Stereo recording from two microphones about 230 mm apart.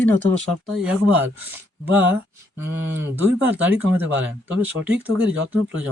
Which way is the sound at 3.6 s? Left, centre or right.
Centre.